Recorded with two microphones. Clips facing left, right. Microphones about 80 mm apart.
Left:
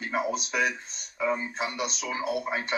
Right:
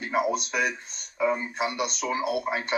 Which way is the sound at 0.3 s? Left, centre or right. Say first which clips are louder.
Right 1 dB; centre.